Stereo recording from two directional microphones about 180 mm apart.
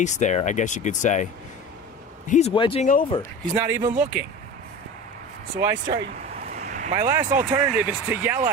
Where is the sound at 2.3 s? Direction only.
35° left (ahead or behind).